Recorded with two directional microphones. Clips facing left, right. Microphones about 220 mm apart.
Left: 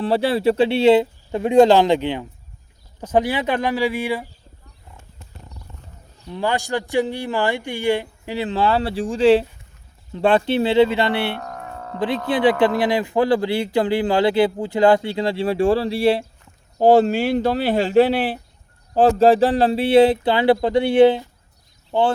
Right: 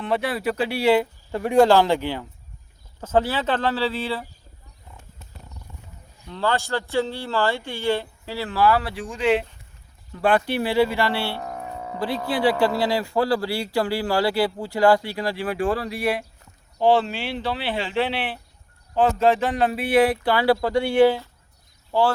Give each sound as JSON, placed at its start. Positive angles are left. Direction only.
{"t": 0.0, "sound": "speech", "side_deg": 30}
{"t": 6.2, "sound": "speech", "side_deg": 15}
{"t": 11.3, "sound": "music", "side_deg": -10}
{"t": 11.9, "sound": "speech", "side_deg": 20}
{"t": 16.7, "sound": "speech", "side_deg": 40}